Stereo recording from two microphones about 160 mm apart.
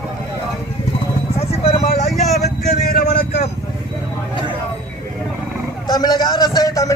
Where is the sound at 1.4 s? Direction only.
40° left (ahead or behind).